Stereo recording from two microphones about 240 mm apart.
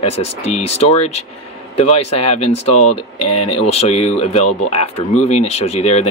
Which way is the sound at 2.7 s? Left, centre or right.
Left.